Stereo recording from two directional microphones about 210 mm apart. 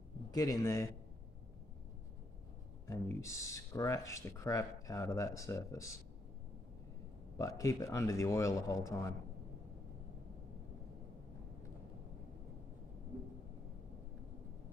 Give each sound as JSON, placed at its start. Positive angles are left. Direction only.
{"t": 0.3, "sound": "speech", "side_deg": 15}
{"t": 3.2, "sound": "speech", "side_deg": 15}
{"t": 7.3, "sound": "speech", "side_deg": 15}